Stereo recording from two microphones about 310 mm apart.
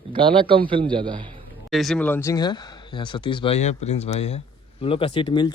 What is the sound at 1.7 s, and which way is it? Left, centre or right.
Speech, centre.